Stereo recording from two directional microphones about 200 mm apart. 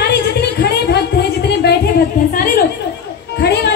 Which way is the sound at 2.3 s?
45° left (ahead or behind).